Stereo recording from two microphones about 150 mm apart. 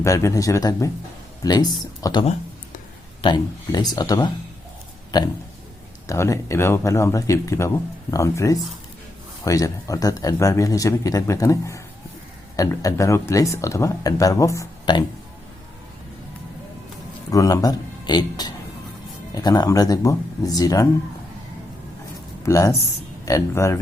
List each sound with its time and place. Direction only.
0.0 s speech: 20° left (ahead or behind)
6.1 s speech: 20° left (ahead or behind)
17.3 s speech: 25° left (ahead or behind)
22.4 s speech: 20° left (ahead or behind)